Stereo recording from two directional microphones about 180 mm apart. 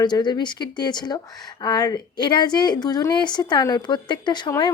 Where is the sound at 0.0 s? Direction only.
25° left (ahead or behind).